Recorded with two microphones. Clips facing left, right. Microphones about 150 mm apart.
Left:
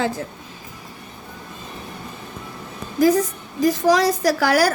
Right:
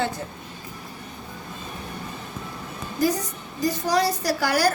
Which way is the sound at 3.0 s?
90° left.